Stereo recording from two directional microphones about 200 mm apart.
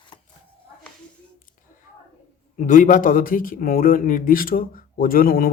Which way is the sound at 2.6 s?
40° left (ahead or behind).